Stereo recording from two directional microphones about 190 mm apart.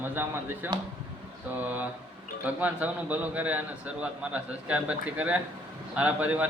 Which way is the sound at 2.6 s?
10° right (ahead or behind).